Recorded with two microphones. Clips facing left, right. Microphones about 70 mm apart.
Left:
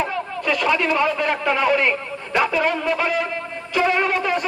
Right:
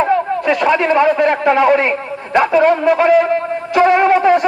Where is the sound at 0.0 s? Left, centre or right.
Right.